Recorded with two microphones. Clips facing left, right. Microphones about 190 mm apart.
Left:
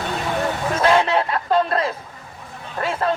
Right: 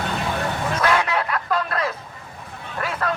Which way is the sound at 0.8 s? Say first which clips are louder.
Left 5 dB; 25° left (ahead or behind).